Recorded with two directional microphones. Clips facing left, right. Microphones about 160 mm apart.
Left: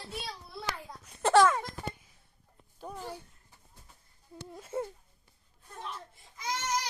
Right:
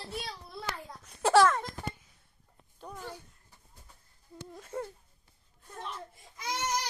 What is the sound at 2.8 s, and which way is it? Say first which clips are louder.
Speech: left 2 dB; 10° left (ahead or behind).